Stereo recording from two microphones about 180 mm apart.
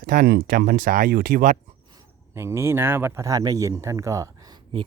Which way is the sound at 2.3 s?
15° right (ahead or behind).